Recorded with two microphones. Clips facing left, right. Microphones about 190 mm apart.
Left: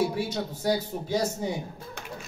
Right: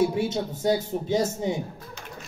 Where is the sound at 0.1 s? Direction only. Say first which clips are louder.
Right 4 dB; 20° right (ahead or behind).